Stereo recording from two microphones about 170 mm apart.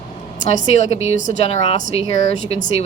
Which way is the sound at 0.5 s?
45° left (ahead or behind).